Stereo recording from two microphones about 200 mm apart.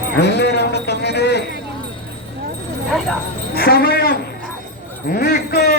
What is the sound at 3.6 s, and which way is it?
Livestock, 50° left (ahead or behind).